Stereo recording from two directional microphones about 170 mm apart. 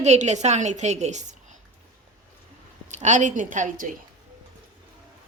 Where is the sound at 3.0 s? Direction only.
45° right (ahead or behind).